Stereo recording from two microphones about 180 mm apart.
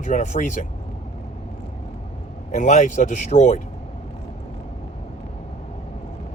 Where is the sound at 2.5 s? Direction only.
40° left (ahead or behind).